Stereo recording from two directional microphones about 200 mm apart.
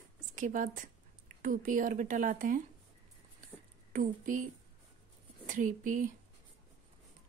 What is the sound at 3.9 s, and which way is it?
Speech, 40° right (ahead or behind).